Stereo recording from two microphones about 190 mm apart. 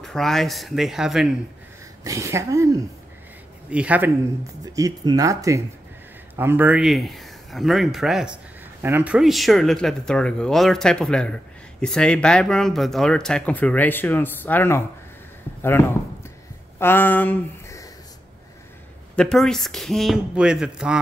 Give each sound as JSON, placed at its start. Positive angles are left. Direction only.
{"t": 0.0, "sound": "speech", "side_deg": 0}
{"t": 2.0, "sound": "speech", "side_deg": -15}
{"t": 4.7, "sound": "speech", "side_deg": -20}
{"t": 16.7, "sound": "a sound", "side_deg": 10}
{"t": 19.1, "sound": "speech", "side_deg": 0}